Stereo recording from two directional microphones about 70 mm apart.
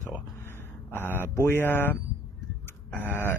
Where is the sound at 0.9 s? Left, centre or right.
Left.